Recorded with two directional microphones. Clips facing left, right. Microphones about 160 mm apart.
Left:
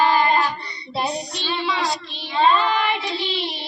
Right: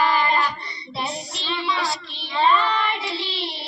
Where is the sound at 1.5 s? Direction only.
25° left (ahead or behind).